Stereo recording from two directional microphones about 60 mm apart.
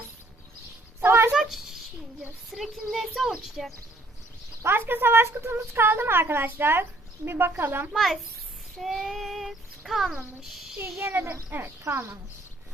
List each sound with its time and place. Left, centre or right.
1.0 s a sound: right
1.4 s a sound: centre
2.5 s child singing: centre
4.6 s a woman's voice: right
7.9 s child singing: centre
10.8 s a woman's voice: right